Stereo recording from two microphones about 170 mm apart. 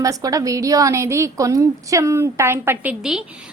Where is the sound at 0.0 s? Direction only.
20° right (ahead or behind).